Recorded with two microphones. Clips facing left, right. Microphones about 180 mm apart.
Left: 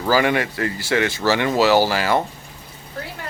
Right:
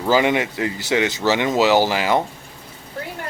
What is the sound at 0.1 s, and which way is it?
Speech, 20° right (ahead or behind).